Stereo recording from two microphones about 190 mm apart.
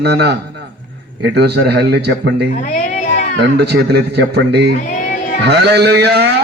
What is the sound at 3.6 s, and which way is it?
Speech, 60° right (ahead or behind).